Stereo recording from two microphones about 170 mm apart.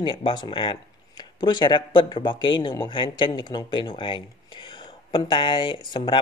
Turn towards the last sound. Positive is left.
turn(degrees=25)  # may be behind; listen again after turning